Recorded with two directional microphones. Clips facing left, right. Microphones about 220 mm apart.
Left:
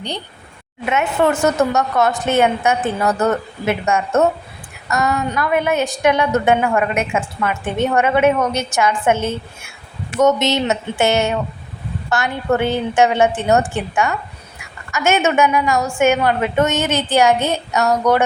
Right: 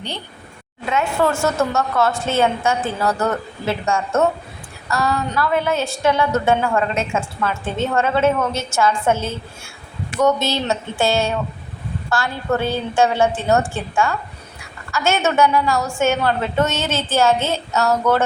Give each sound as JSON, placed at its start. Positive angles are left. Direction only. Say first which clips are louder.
{"t": 0.9, "sound": "a woman's voice", "louder": "left 2 dB", "side_deg": 20}